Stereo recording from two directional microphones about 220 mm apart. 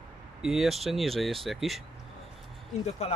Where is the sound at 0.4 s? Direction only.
Centre (ahead or behind).